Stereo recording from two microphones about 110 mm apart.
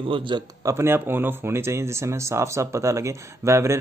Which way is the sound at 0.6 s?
20° right (ahead or behind).